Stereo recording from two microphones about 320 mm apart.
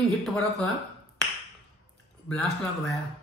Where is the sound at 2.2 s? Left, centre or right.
Centre.